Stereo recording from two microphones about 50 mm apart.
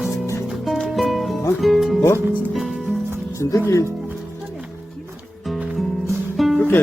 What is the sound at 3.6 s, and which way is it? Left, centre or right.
Speech, left.